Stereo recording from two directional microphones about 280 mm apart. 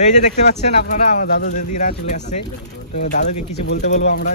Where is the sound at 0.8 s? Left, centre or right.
Left.